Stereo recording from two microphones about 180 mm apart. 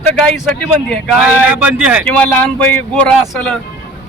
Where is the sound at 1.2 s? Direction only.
5° right (ahead or behind).